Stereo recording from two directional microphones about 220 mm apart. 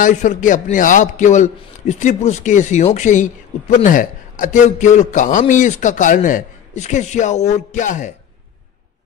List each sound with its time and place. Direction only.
0.0 s a man's voice: 35° left (ahead or behind)